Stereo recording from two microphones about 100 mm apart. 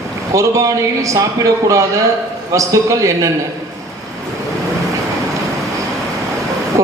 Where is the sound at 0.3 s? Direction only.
35° right (ahead or behind).